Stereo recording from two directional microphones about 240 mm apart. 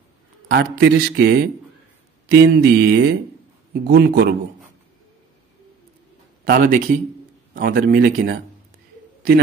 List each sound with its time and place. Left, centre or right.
0.5 s a man's voice: right
6.4 s a man's voice: right